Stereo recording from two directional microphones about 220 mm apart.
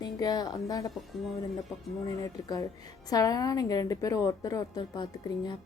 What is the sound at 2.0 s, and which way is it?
A woman's voice, 15° left (ahead or behind).